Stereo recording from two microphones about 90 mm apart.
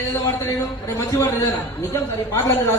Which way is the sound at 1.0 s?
30° left (ahead or behind).